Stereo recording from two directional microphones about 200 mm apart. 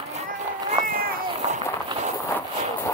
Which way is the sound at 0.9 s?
45° right (ahead or behind).